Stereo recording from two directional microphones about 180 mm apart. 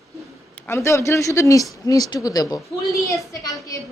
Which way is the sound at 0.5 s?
15° left (ahead or behind).